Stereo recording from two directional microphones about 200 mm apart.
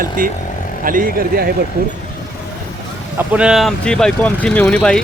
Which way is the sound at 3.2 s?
5° right (ahead or behind).